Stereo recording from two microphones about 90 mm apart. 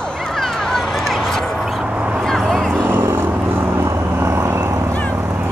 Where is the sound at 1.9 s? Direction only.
15° right (ahead or behind).